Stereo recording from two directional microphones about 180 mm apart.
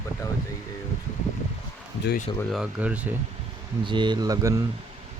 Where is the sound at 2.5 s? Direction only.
5° right (ahead or behind).